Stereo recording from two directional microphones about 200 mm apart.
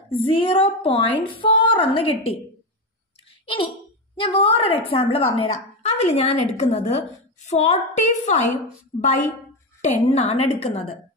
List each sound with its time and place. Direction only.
0.1 s a woman's voice: 25° left (ahead or behind)
3.4 s a woman's voice: 25° left (ahead or behind)